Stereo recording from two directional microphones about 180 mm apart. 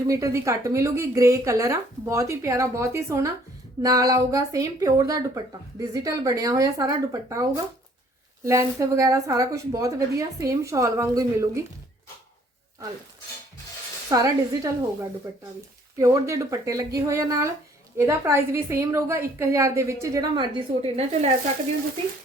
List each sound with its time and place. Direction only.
0.1 s a woman's voice: 15° right (ahead or behind)
14.1 s speech: 20° right (ahead or behind)
16.0 s a woman's voice: 15° right (ahead or behind); by 21.3 s 35° right (ahead or behind)